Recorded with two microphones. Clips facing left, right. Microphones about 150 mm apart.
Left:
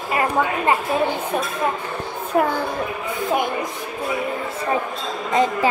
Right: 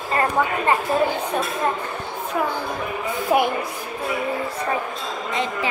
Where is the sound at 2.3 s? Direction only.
50° left (ahead or behind).